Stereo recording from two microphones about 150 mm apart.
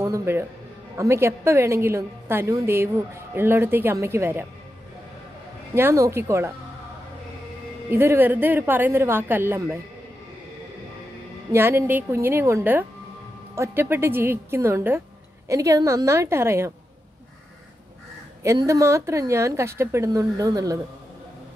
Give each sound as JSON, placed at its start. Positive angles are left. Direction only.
{"t": 0.0, "sound": "a woman's voice", "side_deg": -15}
{"t": 5.8, "sound": "a woman's voice", "side_deg": -20}
{"t": 7.9, "sound": "a woman's voice", "side_deg": -15}
{"t": 11.5, "sound": "a woman's voice", "side_deg": -15}
{"t": 18.4, "sound": "a woman's voice", "side_deg": -20}